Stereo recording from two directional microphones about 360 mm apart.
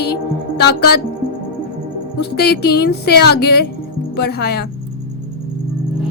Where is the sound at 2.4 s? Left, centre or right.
Left.